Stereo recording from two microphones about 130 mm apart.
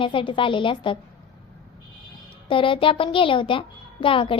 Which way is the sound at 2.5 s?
40° left (ahead or behind).